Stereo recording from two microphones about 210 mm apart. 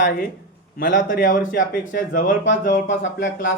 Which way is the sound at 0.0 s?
45° left (ahead or behind).